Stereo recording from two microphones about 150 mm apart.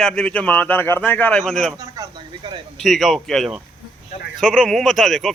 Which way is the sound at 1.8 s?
20° right (ahead or behind).